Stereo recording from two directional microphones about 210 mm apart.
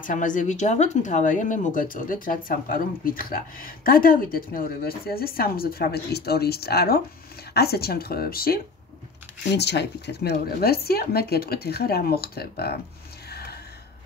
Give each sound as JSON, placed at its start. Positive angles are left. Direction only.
{"t": 0.0, "sound": "speech", "side_deg": 40}
{"t": 9.6, "sound": "speech", "side_deg": 55}
{"t": 13.3, "sound": "gasp", "side_deg": 50}